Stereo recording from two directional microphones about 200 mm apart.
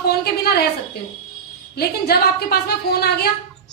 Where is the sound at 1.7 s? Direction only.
50° left (ahead or behind).